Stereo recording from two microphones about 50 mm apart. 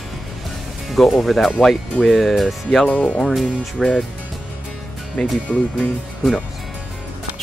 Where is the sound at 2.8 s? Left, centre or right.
Left.